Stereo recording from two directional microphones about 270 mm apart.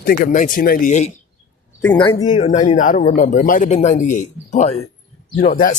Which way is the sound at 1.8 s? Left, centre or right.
Centre.